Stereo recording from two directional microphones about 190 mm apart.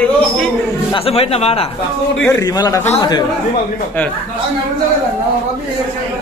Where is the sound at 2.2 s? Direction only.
20° left (ahead or behind).